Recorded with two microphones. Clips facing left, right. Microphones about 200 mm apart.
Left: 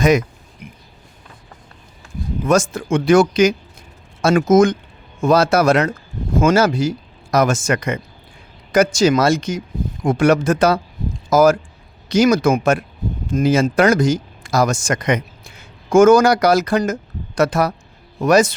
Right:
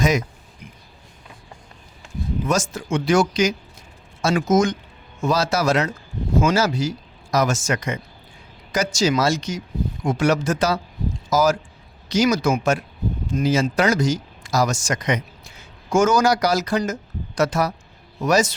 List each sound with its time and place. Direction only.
2.5 s speech: 55° left (ahead or behind)